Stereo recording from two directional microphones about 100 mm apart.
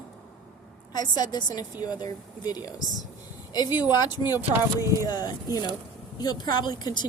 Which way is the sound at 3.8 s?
45° left (ahead or behind).